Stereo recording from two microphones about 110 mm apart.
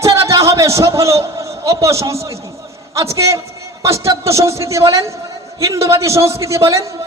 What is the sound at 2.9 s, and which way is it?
A man's voice, 30° right (ahead or behind).